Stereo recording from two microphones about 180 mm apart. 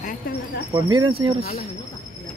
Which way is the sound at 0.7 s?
25° right (ahead or behind).